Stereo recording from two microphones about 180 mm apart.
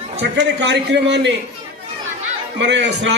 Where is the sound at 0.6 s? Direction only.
75° right (ahead or behind).